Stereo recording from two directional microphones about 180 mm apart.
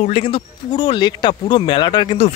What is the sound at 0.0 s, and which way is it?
Speech, 35° left (ahead or behind).